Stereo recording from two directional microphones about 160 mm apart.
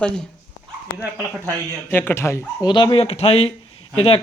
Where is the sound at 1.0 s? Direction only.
10° right (ahead or behind).